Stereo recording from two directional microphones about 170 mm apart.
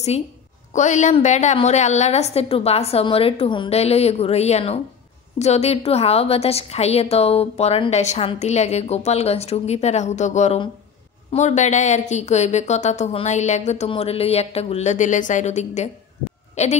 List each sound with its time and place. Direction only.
0.7 s a woman's voice: 45° left (ahead or behind)